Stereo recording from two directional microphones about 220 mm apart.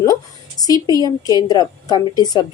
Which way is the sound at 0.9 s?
20° right (ahead or behind).